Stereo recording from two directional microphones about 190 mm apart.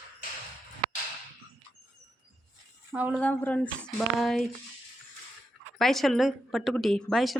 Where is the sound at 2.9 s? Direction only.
10° right (ahead or behind).